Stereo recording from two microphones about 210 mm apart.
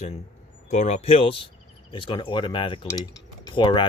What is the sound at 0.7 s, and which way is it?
Speech, 35° left (ahead or behind).